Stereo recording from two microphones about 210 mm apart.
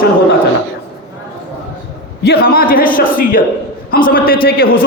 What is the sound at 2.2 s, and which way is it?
A man's voice, 50° left (ahead or behind).